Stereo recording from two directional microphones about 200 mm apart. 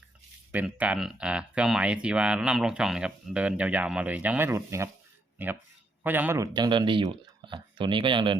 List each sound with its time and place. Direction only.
0.5 s speech: 5° right (ahead or behind); by 8.4 s 25° right (ahead or behind)